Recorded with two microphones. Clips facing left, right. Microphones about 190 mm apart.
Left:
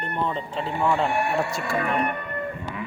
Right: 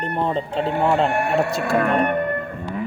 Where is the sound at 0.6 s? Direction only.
65° right (ahead or behind).